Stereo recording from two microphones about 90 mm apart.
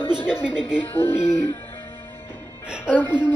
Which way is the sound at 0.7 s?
25° left (ahead or behind).